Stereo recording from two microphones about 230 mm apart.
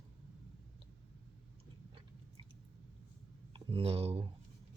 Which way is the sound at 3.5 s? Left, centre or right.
Right.